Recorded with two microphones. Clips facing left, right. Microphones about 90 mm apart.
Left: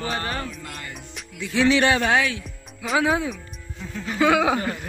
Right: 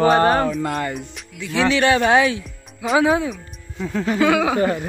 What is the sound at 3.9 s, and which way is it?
Speech, 65° right (ahead or behind).